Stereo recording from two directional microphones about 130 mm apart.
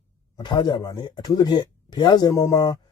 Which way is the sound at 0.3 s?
35° left (ahead or behind).